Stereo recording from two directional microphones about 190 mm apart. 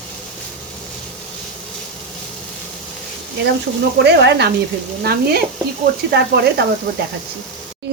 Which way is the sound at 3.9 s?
60° right (ahead or behind).